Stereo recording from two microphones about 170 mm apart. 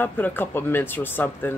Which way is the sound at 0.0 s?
10° left (ahead or behind).